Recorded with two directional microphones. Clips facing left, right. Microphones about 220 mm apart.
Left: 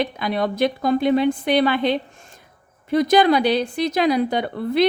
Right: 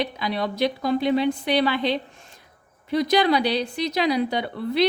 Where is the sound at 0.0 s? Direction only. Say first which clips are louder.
Left 4 dB; 50° left (ahead or behind).